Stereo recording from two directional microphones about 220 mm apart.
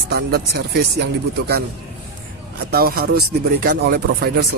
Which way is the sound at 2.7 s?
45° right (ahead or behind).